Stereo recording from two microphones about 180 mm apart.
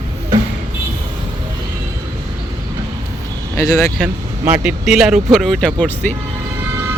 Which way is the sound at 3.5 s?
15° left (ahead or behind).